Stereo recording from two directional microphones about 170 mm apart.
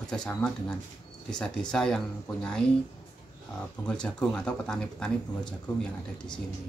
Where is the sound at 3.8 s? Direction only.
5° left (ahead or behind).